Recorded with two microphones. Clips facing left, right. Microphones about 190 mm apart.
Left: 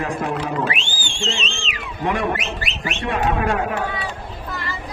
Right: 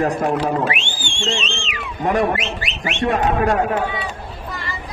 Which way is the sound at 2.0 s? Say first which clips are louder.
Right 4 dB; 40° right (ahead or behind).